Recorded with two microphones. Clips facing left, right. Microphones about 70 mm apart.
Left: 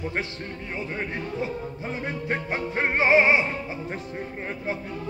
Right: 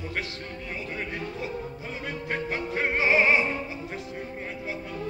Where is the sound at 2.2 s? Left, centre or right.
Left.